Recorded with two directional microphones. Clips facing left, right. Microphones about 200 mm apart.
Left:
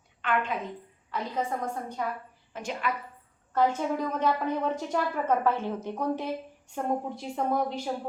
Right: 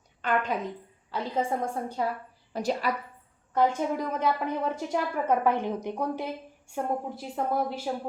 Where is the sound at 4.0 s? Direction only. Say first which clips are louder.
Even; 10° right (ahead or behind).